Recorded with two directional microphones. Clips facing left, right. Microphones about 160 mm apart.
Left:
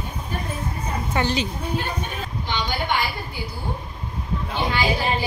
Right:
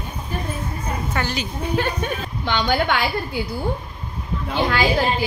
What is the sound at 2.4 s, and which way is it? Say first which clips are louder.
Speech: right 7 dB; 70° right (ahead or behind).